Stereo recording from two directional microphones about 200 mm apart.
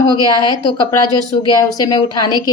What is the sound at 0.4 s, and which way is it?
A woman's voice, 20° left (ahead or behind).